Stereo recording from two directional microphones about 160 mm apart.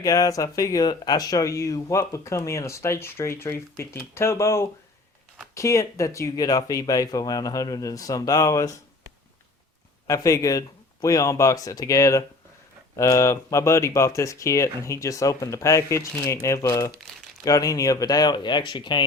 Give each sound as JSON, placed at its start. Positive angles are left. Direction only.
{"t": 0.0, "sound": "speech", "side_deg": 20}
{"t": 10.1, "sound": "speech", "side_deg": 20}